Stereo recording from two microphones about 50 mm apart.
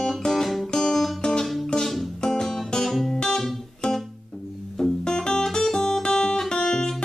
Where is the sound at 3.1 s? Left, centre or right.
Centre.